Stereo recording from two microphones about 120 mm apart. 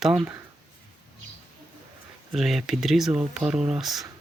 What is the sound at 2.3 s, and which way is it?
Speech, centre (ahead or behind).